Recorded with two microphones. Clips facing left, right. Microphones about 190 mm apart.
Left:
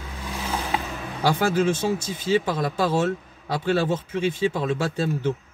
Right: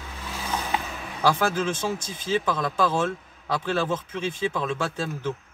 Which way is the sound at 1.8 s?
10° left (ahead or behind).